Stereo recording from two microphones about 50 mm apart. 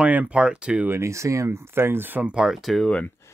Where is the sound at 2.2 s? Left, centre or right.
Centre.